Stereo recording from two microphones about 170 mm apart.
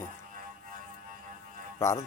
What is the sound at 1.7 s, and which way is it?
Speech, 20° left (ahead or behind).